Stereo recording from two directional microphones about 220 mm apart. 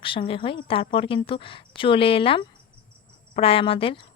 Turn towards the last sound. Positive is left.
turn(degrees=25)  # may be behind; listen again after turning